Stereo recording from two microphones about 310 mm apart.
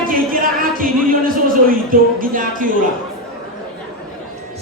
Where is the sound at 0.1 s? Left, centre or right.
Right.